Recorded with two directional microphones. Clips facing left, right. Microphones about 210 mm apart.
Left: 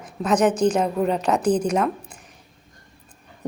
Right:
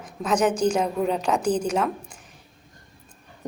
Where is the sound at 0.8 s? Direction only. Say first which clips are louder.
Left 2 dB; 5° left (ahead or behind).